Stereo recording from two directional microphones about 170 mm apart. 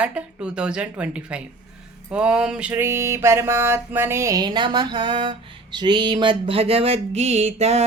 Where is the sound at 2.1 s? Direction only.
5° right (ahead or behind).